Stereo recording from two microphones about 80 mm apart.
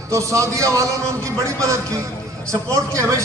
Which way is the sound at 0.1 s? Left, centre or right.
Right.